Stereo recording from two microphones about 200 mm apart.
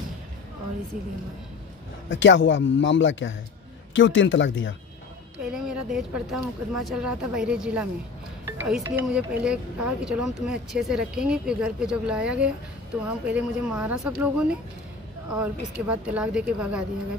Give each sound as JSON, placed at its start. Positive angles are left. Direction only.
{"t": 2.0, "sound": "speech", "side_deg": 65}
{"t": 5.5, "sound": "speech", "side_deg": -5}
{"t": 15.9, "sound": "speech", "side_deg": -5}